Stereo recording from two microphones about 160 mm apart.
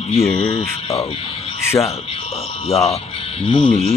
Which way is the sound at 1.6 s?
15° left (ahead or behind).